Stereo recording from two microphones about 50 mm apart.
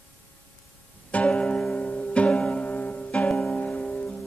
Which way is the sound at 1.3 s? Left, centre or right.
Centre.